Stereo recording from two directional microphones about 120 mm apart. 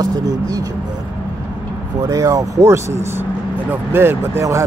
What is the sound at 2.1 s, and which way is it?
Speech, 30° right (ahead or behind).